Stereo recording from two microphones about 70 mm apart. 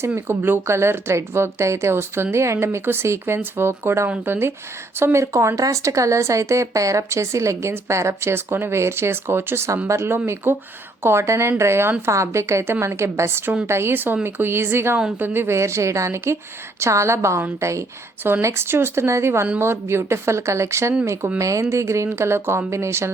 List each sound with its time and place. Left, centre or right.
0.3 s speech: right
18.4 s speech: right